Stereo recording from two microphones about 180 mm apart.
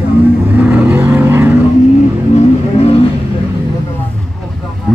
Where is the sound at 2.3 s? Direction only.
35° left (ahead or behind).